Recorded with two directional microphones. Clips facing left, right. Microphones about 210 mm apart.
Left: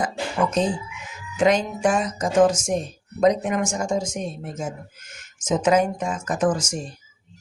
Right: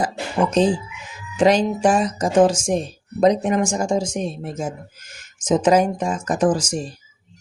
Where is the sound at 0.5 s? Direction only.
30° right (ahead or behind).